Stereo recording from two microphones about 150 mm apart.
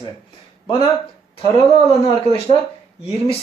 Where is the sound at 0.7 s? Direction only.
35° left (ahead or behind).